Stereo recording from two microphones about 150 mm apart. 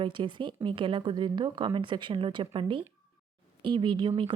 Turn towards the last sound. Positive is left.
turn(degrees=-35)  # may be behind; listen again after turning